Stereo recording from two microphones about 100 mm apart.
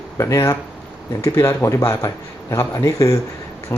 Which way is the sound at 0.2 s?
30° left (ahead or behind).